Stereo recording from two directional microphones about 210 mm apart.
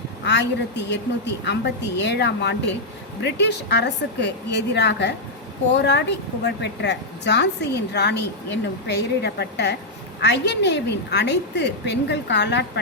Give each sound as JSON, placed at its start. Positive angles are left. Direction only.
{"t": 0.3, "sound": "a woman's voice", "side_deg": 55}